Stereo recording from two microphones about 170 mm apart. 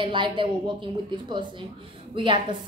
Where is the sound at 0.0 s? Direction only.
30° right (ahead or behind).